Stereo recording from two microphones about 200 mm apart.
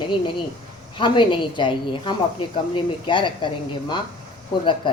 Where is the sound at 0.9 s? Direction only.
25° left (ahead or behind).